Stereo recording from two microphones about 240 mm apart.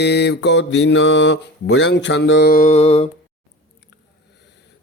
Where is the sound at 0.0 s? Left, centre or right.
Left.